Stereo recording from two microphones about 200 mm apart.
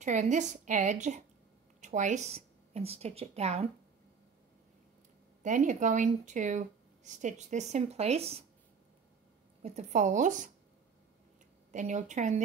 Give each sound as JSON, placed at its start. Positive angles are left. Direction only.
{"t": 0.0, "sound": "a woman's voice", "side_deg": -35}
{"t": 5.4, "sound": "speech", "side_deg": -40}
{"t": 9.6, "sound": "speech", "side_deg": -30}
{"t": 11.7, "sound": "speech", "side_deg": -35}